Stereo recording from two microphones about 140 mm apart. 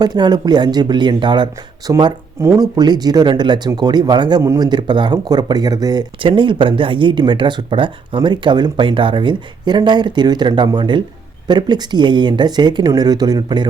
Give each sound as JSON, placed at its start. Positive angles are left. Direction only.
{"t": 0.0, "sound": "speech", "side_deg": -30}